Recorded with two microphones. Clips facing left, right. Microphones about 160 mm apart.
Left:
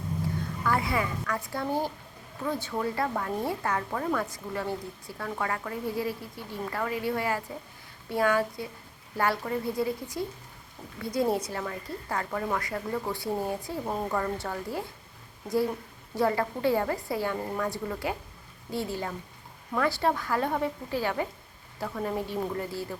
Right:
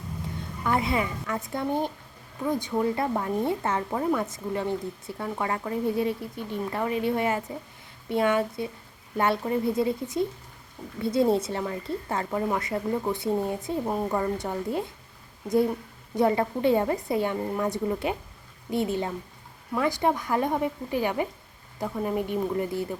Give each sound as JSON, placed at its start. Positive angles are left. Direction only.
{"t": 0.6, "sound": "speech", "side_deg": -20}
{"t": 16.1, "sound": "a woman's voice", "side_deg": -20}